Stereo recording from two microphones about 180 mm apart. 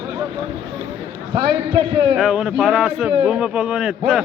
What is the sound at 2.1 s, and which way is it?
Speech, 5° right (ahead or behind).